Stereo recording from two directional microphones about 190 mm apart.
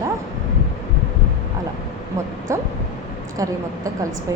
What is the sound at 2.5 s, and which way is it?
Speech, 15° right (ahead or behind).